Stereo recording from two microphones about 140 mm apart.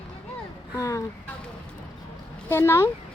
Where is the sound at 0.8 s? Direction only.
25° left (ahead or behind).